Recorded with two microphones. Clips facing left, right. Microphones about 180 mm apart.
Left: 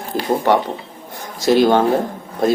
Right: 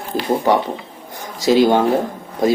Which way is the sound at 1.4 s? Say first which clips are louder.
Even; 15° right (ahead or behind).